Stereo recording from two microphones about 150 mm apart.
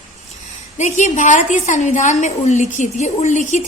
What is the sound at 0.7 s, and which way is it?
A woman's voice, 50° left (ahead or behind).